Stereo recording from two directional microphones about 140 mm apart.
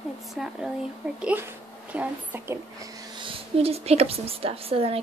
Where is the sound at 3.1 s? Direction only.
40° right (ahead or behind).